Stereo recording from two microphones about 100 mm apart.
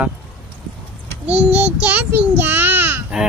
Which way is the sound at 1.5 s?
15° right (ahead or behind).